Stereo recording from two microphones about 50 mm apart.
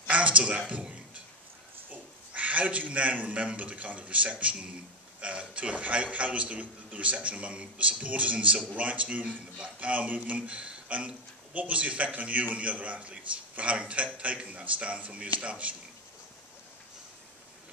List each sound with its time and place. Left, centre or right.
0.1 s speech: right
1.9 s a man's voice: right